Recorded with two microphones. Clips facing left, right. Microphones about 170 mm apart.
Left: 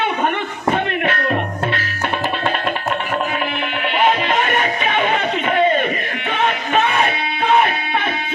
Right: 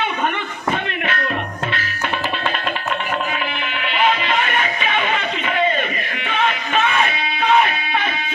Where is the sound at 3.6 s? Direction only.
50° left (ahead or behind).